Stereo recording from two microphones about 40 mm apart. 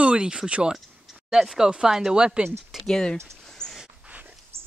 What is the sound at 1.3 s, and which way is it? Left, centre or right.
Speech, centre.